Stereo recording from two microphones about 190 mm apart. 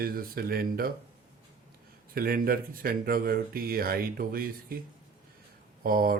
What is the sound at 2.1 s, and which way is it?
Speech, 50° right (ahead or behind).